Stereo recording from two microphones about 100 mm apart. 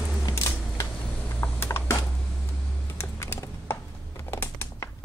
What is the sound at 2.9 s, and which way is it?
Computer keyboard, 25° left (ahead or behind).